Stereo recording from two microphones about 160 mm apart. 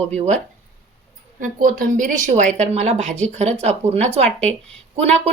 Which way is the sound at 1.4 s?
60° right (ahead or behind).